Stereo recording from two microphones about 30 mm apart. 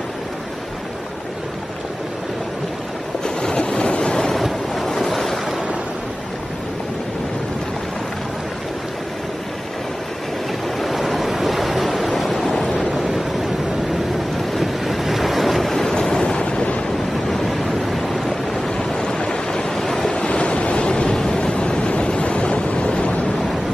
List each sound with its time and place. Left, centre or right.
3.3 s vehicle: left
4.4 s waves: centre
10.8 s waves: centre
14.5 s waves: centre
15.9 s waves: left
17.5 s vehicle: centre
18.8 s waves: left
19.7 s waves: centre
20.1 s waves: left